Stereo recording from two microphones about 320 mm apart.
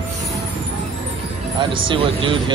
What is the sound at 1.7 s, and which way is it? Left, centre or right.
Speech, centre.